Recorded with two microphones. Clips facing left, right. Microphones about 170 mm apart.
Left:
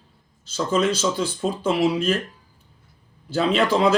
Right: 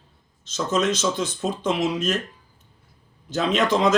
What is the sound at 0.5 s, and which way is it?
Speech, 10° left (ahead or behind).